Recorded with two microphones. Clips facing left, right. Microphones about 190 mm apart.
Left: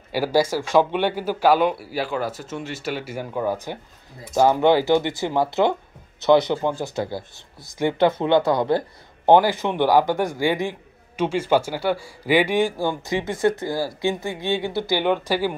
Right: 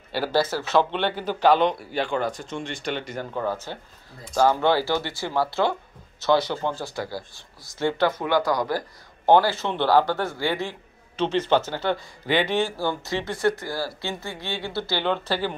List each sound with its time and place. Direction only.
0.1 s speech: 10° left (ahead or behind)